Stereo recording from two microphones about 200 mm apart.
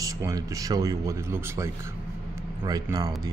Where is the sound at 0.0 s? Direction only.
15° right (ahead or behind).